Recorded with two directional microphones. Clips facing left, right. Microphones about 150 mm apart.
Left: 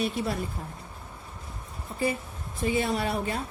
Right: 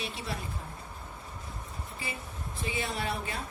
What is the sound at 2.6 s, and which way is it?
Speech, 45° left (ahead or behind).